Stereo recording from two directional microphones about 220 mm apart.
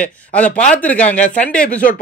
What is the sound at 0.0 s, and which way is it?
Speech, 5° left (ahead or behind).